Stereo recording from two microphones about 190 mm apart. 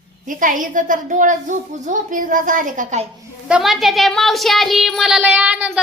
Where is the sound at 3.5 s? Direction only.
Centre (ahead or behind).